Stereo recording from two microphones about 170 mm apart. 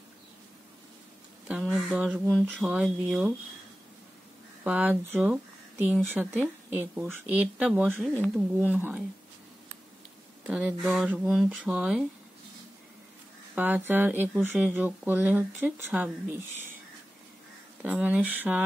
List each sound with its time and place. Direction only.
1.6 s speech: centre (ahead or behind)
4.6 s speech: 10° right (ahead or behind)
10.4 s speech: 10° right (ahead or behind)
13.6 s speech: 10° right (ahead or behind)
17.8 s speech: 10° right (ahead or behind)